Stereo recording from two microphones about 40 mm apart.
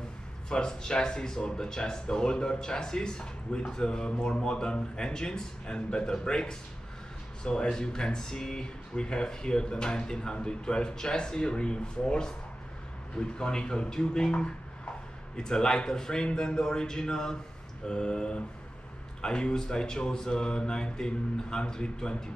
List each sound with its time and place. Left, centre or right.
0.5 s speech: centre